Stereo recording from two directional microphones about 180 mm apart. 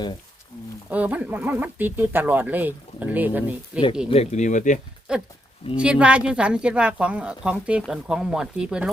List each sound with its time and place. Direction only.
0.9 s speech: 10° right (ahead or behind)
4.1 s speech: 35° left (ahead or behind)
5.1 s speech: 5° right (ahead or behind)